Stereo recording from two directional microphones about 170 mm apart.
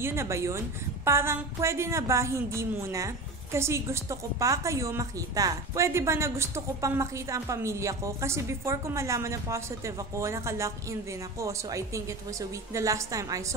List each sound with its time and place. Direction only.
0.0 s a woman's voice: 15° right (ahead or behind)